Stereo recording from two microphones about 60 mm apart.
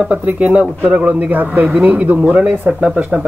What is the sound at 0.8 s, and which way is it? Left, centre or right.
Speech, right.